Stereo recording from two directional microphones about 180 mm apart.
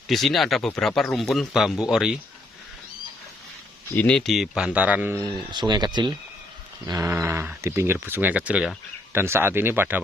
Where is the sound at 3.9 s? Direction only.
5° left (ahead or behind).